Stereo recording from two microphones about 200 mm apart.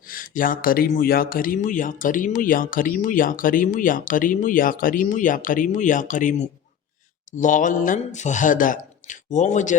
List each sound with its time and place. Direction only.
0.1 s speech: 45° left (ahead or behind)
7.3 s speech: 40° left (ahead or behind)